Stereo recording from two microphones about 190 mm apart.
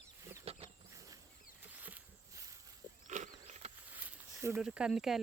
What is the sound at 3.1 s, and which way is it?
Wild animals, 40° right (ahead or behind).